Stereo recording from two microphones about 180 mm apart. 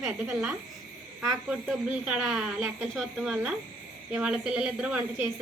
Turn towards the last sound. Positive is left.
turn(degrees=-5)  # may be behind; listen again after turning